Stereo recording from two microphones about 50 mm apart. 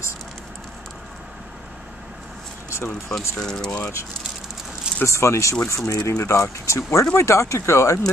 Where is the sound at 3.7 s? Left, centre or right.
Left.